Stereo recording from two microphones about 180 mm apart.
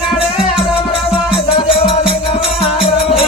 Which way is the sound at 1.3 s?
30° left (ahead or behind).